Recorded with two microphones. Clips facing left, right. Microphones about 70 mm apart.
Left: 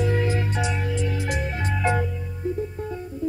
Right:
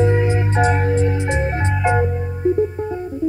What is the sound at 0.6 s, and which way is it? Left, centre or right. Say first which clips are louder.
Music: right 9 dB; right.